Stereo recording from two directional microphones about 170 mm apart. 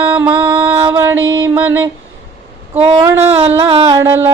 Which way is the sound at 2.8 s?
35° right (ahead or behind).